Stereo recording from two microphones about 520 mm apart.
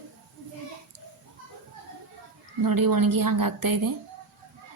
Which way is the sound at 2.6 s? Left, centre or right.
Right.